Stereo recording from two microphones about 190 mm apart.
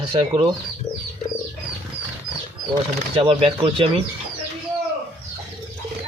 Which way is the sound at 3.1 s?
30° right (ahead or behind).